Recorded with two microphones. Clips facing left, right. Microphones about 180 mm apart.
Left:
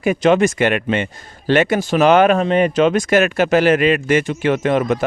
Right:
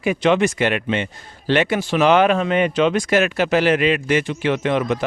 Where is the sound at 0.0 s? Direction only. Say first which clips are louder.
Left 3 dB; 45° left (ahead or behind).